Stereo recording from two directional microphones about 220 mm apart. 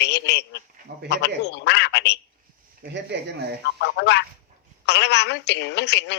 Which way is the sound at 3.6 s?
50° left (ahead or behind).